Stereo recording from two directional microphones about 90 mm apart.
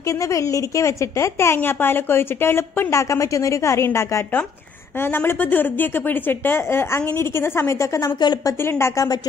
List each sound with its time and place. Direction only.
0.3 s a woman's voice: 35° left (ahead or behind)
8.2 s a woman's voice: 55° left (ahead or behind)
8.6 s speech: 30° left (ahead or behind)